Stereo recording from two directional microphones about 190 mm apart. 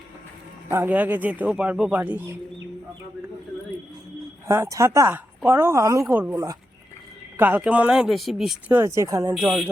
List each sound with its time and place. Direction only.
0.7 s a man's voice: 10° right (ahead or behind)
4.4 s a man's voice: 15° right (ahead or behind)
8.8 s a man's voice: 15° right (ahead or behind)
9.3 s speech: centre (ahead or behind)